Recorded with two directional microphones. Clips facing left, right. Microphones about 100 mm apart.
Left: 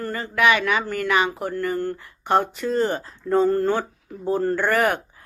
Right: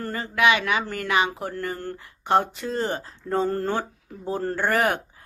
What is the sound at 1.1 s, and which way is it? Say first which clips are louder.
Speech: left 1 dB; 40° left (ahead or behind).